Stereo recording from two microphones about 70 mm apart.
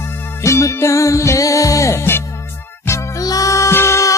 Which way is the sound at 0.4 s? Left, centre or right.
Left.